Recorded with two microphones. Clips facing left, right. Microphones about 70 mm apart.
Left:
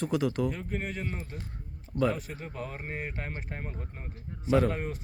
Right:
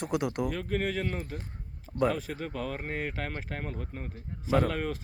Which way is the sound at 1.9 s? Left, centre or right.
Right.